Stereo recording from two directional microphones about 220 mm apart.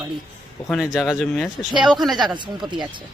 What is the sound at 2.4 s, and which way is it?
Speech, 20° right (ahead or behind).